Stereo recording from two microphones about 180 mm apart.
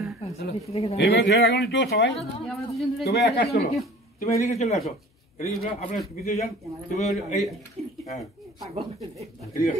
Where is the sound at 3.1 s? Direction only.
65° left (ahead or behind).